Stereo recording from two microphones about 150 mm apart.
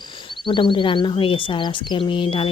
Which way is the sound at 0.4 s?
35° left (ahead or behind).